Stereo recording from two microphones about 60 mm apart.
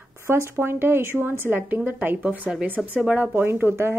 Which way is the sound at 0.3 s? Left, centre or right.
Right.